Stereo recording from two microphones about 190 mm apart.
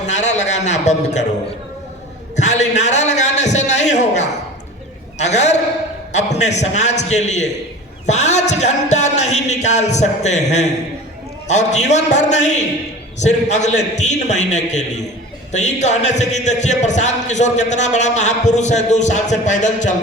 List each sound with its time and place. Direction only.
0.0 s speech: 40° left (ahead or behind)
2.3 s speech: 35° left (ahead or behind)
5.1 s speech: 35° left (ahead or behind)